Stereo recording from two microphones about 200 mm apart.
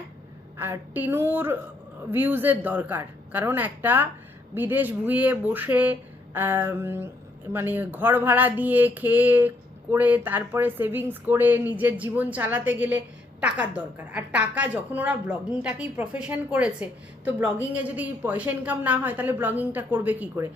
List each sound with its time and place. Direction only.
0.5 s a woman's voice: 10° right (ahead or behind)